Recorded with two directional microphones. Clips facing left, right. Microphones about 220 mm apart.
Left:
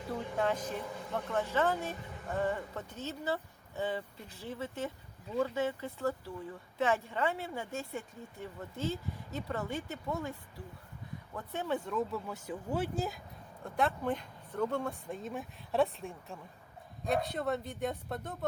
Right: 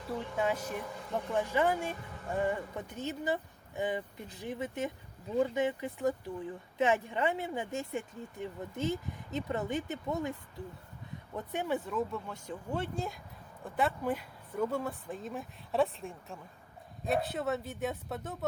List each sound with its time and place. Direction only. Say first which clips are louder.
0.4 s speech: even; 10° right (ahead or behind)
11.3 s speech: right 2 dB; 15° right (ahead or behind)
11.9 s speech: even; centre (ahead or behind)